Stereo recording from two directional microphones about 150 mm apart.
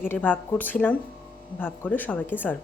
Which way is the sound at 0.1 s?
10° left (ahead or behind).